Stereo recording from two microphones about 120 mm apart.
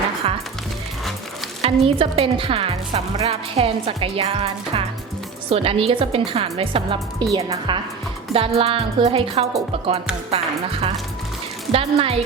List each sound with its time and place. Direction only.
0.2 s music: 50° right (ahead or behind)
1.6 s a woman's voice: 50° right (ahead or behind)
8.3 s a woman's voice: 55° right (ahead or behind)